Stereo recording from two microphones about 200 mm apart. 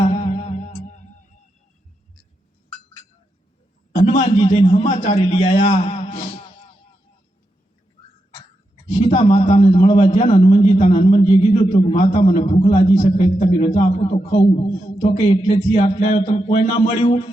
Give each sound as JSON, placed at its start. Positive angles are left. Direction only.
{"t": 0.0, "sound": "music", "side_deg": 30}
{"t": 4.2, "sound": "a man's voice", "side_deg": 25}
{"t": 8.9, "sound": "a man's voice", "side_deg": 30}